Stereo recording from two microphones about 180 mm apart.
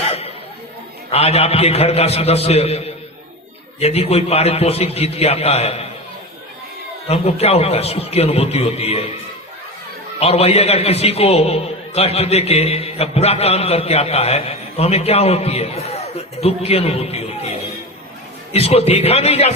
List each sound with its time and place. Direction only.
0.1 s chatter: 35° left (ahead or behind)
1.1 s a man's voice: 35° left (ahead or behind)
7.1 s a man's voice: 35° left (ahead or behind)
10.2 s a man's voice: 35° left (ahead or behind)